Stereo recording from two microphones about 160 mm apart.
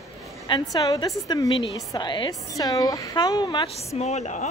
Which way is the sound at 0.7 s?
25° left (ahead or behind).